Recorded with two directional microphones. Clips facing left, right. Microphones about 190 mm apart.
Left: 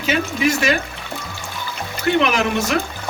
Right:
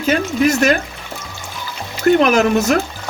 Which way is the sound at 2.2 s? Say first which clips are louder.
Right 6 dB; 40° right (ahead or behind).